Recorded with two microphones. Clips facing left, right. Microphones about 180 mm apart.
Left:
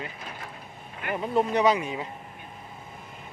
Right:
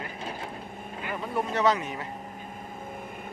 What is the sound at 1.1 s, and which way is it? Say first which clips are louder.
Speech: left 5 dB; 20° left (ahead or behind).